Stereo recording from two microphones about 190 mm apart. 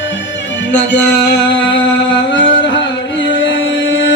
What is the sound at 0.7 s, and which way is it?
Music, 65° left (ahead or behind).